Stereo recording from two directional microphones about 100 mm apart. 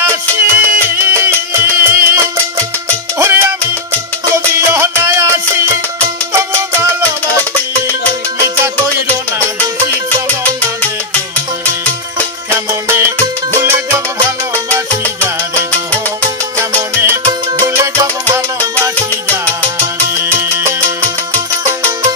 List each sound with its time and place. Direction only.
0.0 s music: 25° right (ahead or behind)
3.2 s salsa music: 25° right (ahead or behind)
4.6 s music: 25° right (ahead or behind)
12.4 s music: 25° right (ahead or behind)
16.9 s music: 25° right (ahead or behind)
19.8 s music: 25° right (ahead or behind)